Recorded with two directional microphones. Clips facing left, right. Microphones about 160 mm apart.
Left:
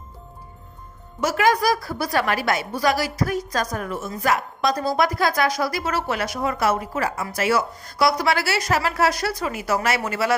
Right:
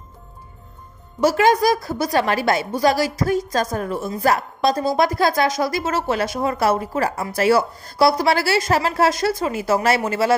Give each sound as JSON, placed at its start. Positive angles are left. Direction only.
{"t": 1.2, "sound": "a woman's voice", "side_deg": -30}